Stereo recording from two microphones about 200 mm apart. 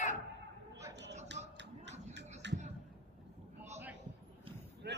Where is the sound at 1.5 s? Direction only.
60° right (ahead or behind).